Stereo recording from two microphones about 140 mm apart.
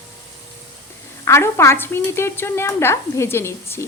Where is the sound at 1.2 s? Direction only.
20° left (ahead or behind).